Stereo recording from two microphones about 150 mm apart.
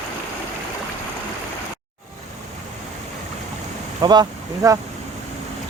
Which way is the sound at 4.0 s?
30° right (ahead or behind).